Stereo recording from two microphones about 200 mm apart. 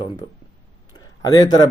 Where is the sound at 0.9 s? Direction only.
20° left (ahead or behind).